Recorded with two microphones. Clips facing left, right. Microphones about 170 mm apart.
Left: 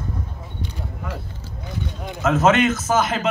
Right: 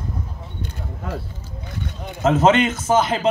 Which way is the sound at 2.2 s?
30° right (ahead or behind).